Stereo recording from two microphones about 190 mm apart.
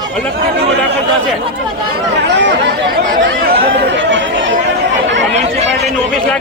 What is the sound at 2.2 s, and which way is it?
Speech, 65° right (ahead or behind).